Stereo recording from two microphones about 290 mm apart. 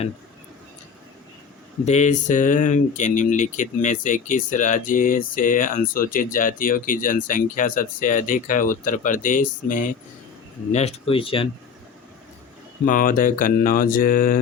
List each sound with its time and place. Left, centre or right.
1.8 s speech: left
12.8 s speech: left